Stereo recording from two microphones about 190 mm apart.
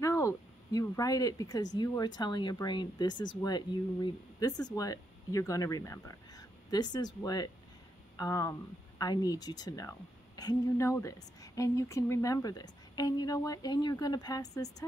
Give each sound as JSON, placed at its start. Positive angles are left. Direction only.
{"t": 0.0, "sound": "speech", "side_deg": 15}